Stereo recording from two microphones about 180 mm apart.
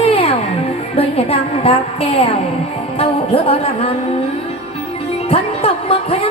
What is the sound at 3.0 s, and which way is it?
Music, 30° left (ahead or behind).